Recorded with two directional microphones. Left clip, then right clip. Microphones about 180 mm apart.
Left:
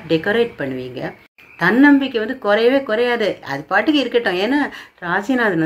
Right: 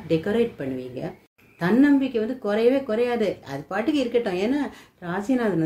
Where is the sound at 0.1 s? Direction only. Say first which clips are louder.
Left 6 dB; 15° right (ahead or behind).